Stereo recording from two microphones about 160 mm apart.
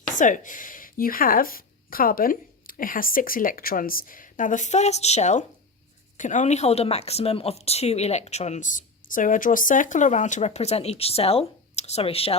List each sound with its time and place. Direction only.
0.2 s a woman's voice: 55° left (ahead or behind); by 12.4 s 35° left (ahead or behind)